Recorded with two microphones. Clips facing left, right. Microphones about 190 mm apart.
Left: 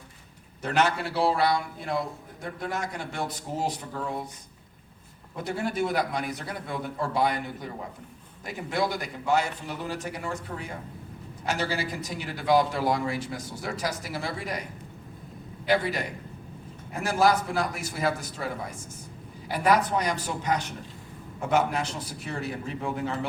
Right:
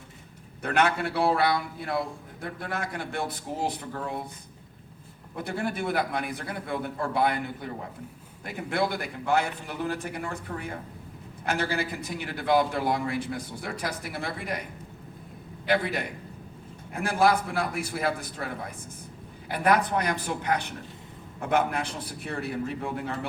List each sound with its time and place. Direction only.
0.6 s a man's voice: 55° right (ahead or behind)
2.6 s a man's voice: 55° right (ahead or behind)
5.4 s a man's voice: 55° right (ahead or behind)
15.6 s a man's voice: 55° right (ahead or behind)
19.5 s a man's voice: 55° right (ahead or behind)